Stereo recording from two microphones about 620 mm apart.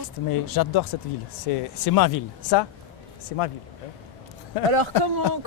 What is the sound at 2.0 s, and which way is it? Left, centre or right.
Speech, left.